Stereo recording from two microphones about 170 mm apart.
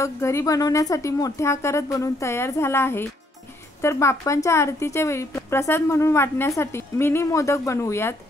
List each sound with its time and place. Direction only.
0.0 s speech: 15° left (ahead or behind)